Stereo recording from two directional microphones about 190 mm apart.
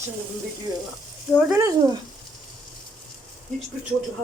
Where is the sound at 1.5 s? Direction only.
15° right (ahead or behind).